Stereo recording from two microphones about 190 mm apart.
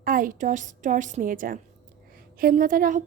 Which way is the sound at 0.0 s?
45° right (ahead or behind).